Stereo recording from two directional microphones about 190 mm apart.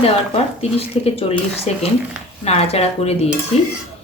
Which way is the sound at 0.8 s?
30° left (ahead or behind).